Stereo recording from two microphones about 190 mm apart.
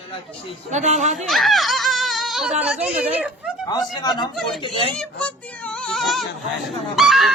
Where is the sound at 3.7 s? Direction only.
20° left (ahead or behind).